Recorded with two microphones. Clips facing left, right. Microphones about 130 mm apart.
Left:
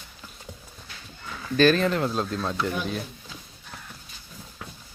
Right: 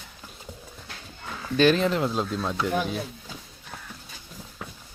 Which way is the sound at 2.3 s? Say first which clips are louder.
Even; 5° right (ahead or behind).